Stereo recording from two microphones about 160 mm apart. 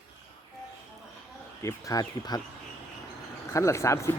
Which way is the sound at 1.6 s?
20° left (ahead or behind).